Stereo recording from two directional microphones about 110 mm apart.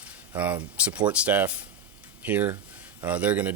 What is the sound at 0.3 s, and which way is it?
Speech, 15° right (ahead or behind).